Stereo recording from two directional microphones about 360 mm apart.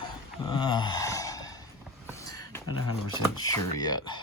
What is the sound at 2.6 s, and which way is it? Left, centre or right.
Speech, left.